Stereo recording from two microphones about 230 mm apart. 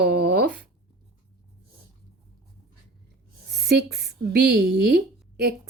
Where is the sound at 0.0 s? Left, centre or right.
Right.